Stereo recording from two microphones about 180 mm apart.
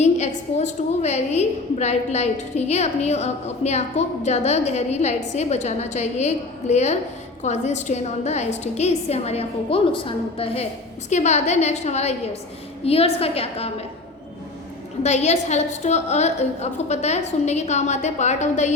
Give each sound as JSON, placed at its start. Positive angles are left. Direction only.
{"t": 0.0, "sound": "a woman's voice", "side_deg": 40}
{"t": 15.0, "sound": "a woman's voice", "side_deg": 40}